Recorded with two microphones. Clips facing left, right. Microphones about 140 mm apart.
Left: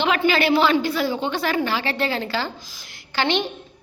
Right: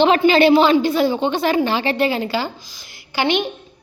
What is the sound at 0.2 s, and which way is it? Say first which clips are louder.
A woman's voice: right 6 dB; 25° right (ahead or behind).